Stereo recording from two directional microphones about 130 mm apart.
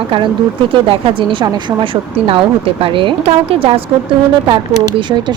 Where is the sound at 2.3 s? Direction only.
40° right (ahead or behind).